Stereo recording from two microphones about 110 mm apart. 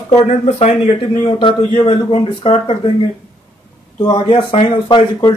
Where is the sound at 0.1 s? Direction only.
90° left.